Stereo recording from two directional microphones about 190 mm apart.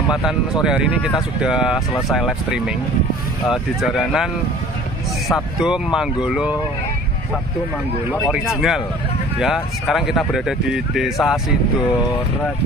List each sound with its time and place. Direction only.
0.1 s speech: centre (ahead or behind)
5.3 s speech: centre (ahead or behind)
8.1 s speech: 5° right (ahead or behind)